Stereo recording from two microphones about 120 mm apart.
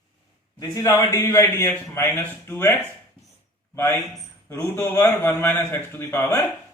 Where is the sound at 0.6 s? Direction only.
30° left (ahead or behind).